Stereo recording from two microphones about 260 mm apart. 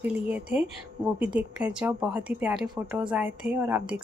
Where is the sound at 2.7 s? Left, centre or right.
Centre.